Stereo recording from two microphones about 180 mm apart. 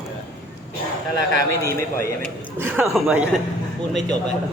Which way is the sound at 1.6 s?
15° left (ahead or behind).